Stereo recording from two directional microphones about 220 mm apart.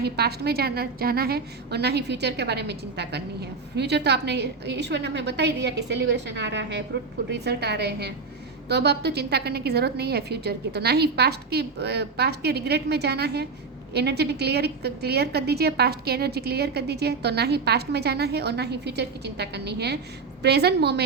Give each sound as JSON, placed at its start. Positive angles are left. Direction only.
{"t": 0.0, "sound": "a woman's voice", "side_deg": -45}